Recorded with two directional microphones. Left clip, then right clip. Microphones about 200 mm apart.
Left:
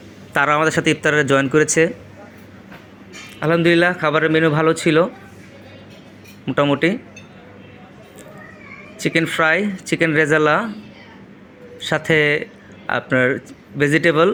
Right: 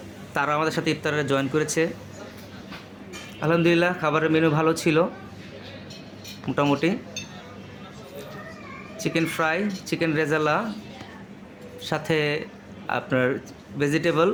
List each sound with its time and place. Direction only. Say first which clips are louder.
0.3 s speech: left 8 dB; 25° left (ahead or behind)
3.4 s a man's voice: left 6 dB; 15° left (ahead or behind)
6.4 s a man's voice: left 6 dB; 15° left (ahead or behind)
9.0 s speech: left 8 dB; 20° left (ahead or behind)
11.9 s a man's voice: left 8 dB; 20° left (ahead or behind)